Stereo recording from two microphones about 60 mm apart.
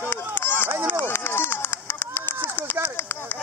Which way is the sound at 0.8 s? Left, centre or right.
Left.